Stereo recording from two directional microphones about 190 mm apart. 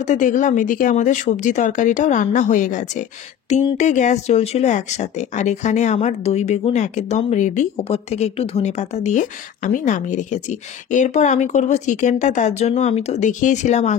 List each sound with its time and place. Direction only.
0.0 s speech: 40° left (ahead or behind)